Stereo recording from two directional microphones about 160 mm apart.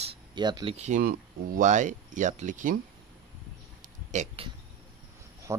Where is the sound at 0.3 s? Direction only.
25° right (ahead or behind).